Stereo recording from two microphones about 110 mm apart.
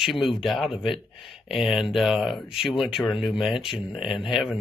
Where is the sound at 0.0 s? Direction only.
Centre (ahead or behind).